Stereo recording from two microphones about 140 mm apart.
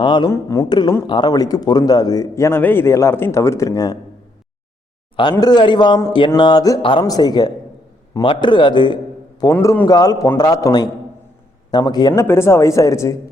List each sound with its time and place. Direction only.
0.0 s a man's voice: 35° left (ahead or behind)
0.3 s a man's voice: 20° left (ahead or behind)
5.4 s a man's voice: 30° left (ahead or behind)
9.4 s a man's voice: 20° left (ahead or behind)
12.2 s a man's voice: 20° left (ahead or behind)